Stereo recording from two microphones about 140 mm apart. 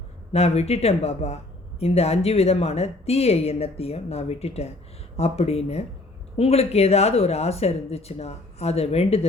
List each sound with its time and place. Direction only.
0.3 s a woman's voice: 50° left (ahead or behind)